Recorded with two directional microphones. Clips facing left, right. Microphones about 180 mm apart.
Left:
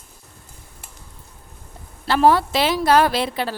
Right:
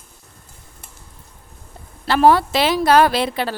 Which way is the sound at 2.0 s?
75° right (ahead or behind).